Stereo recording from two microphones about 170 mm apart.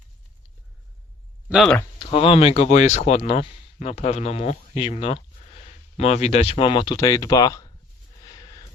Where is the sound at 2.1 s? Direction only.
35° left (ahead or behind).